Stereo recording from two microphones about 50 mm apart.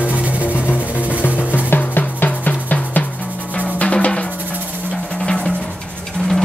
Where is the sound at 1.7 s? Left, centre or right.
Left.